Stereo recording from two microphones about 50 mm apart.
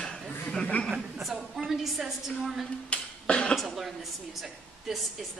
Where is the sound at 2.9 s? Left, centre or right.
Centre.